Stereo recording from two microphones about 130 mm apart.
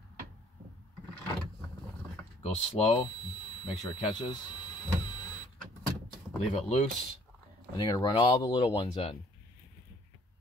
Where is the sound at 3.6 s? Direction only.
40° left (ahead or behind).